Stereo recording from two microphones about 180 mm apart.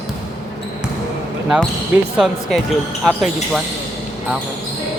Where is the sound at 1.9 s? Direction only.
5° right (ahead or behind).